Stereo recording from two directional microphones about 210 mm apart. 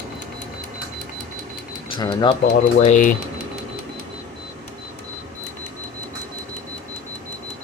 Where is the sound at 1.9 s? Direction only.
20° left (ahead or behind).